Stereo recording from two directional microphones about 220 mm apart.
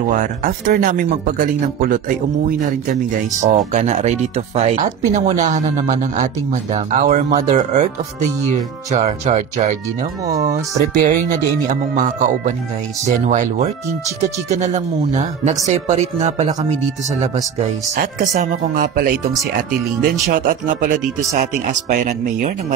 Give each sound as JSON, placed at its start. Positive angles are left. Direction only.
{"t": 0.2, "sound": "speech", "side_deg": -40}
{"t": 18.3, "sound": "speech", "side_deg": -35}
{"t": 20.2, "sound": "speech", "side_deg": -35}